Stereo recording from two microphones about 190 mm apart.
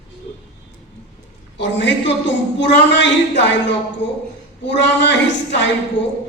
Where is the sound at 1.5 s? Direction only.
70° left (ahead or behind).